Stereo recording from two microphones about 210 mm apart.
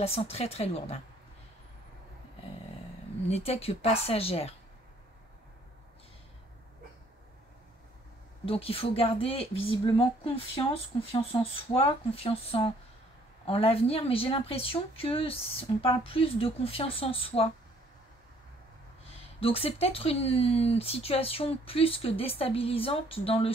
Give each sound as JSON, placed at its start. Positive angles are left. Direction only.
{"t": 0.0, "sound": "speech", "side_deg": 30}
{"t": 3.3, "sound": "speech", "side_deg": 30}
{"t": 8.5, "sound": "speech", "side_deg": 25}
{"t": 19.4, "sound": "speech", "side_deg": 25}